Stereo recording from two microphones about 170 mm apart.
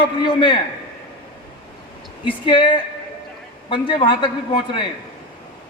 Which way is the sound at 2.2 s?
30° left (ahead or behind).